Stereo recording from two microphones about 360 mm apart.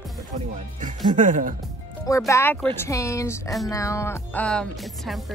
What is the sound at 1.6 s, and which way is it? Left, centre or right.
Speech, centre.